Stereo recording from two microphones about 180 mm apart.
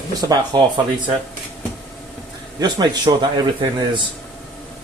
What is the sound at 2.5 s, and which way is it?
A man's voice, 25° right (ahead or behind).